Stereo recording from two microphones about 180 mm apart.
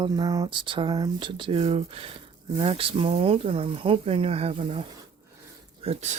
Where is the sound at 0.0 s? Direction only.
25° right (ahead or behind).